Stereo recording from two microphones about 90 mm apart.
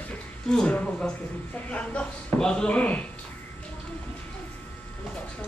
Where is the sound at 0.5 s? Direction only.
10° left (ahead or behind).